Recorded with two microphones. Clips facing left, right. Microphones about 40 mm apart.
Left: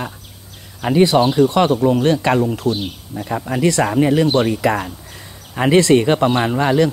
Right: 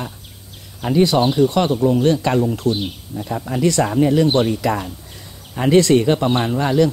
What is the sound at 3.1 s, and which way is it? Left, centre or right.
Speech, centre.